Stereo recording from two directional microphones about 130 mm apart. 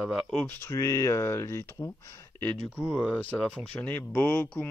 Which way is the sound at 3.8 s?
10° left (ahead or behind).